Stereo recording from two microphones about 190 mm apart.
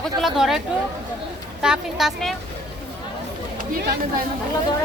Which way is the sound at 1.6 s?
5° right (ahead or behind).